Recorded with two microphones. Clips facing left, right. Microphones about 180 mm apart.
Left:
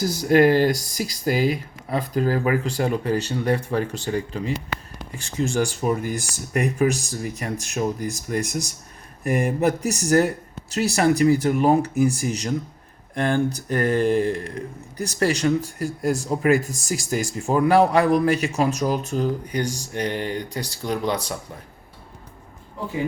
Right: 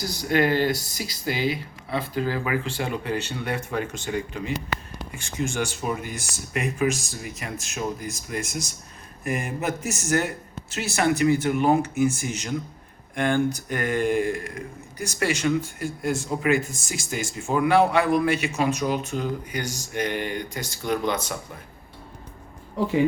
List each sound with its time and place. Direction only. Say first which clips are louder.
0.0 s speech: left 6 dB; 45° left (ahead or behind)